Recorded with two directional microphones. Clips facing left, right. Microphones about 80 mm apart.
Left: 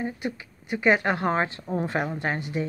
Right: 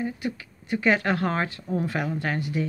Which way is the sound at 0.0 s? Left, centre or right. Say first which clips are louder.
Right 1 dB; left.